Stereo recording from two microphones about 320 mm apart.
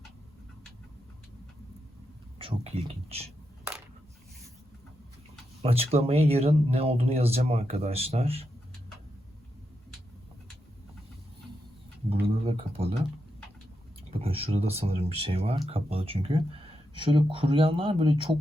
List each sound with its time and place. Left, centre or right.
2.4 s speech: centre
5.6 s speech: centre
12.2 s a sound: centre
14.1 s speech: centre